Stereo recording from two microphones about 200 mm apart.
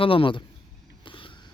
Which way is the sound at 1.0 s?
25° left (ahead or behind).